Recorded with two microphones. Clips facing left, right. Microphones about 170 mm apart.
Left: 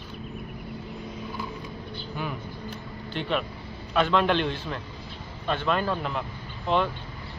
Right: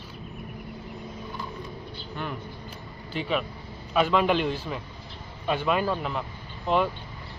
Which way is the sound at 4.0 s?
5° right (ahead or behind).